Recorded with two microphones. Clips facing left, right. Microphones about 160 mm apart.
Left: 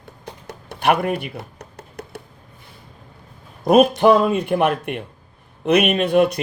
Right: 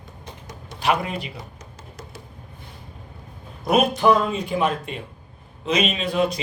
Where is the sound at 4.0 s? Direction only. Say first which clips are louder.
Left 4 dB; 60° left (ahead or behind).